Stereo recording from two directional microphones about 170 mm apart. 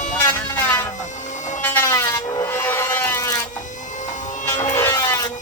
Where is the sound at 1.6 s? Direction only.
15° left (ahead or behind).